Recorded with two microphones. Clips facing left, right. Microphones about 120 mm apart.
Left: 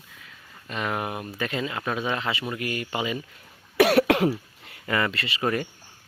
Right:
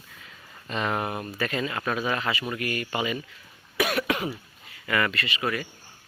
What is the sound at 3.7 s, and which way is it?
Cough, 65° left (ahead or behind).